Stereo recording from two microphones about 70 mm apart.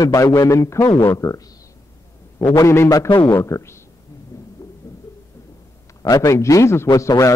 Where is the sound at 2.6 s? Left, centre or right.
Left.